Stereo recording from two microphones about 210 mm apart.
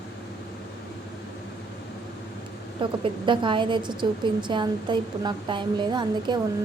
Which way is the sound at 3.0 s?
25° right (ahead or behind).